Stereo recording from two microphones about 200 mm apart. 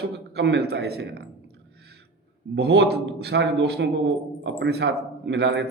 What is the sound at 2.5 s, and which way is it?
A man's voice, 55° right (ahead or behind).